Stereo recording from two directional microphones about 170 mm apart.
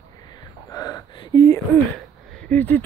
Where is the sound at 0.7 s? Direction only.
20° left (ahead or behind).